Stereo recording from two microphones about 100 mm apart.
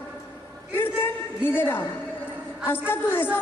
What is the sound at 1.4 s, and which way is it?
A man's voice, 20° left (ahead or behind).